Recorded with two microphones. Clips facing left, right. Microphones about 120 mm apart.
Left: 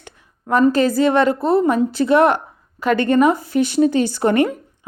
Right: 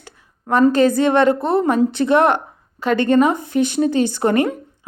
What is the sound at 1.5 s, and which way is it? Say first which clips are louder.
Speech: even; 55° right (ahead or behind).